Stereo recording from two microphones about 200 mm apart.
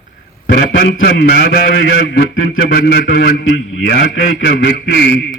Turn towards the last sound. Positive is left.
turn(degrees=55)  # may be behind; listen again after turning